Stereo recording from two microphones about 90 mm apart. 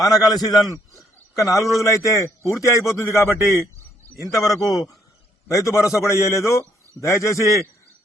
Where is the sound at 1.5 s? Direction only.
35° left (ahead or behind).